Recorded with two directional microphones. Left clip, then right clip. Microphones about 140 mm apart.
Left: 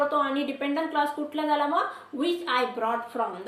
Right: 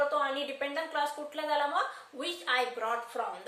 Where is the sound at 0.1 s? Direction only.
25° right (ahead or behind).